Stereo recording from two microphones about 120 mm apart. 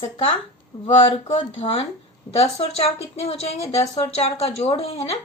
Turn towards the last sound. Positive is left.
turn(degrees=55)  # may be behind; listen again after turning